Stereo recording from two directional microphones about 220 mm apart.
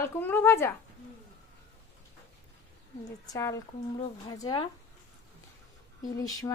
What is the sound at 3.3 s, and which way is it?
Speech, 15° left (ahead or behind).